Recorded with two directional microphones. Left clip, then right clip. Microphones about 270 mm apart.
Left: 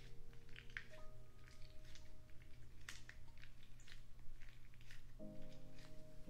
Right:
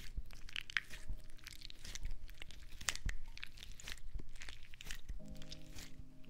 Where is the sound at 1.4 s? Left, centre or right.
Right.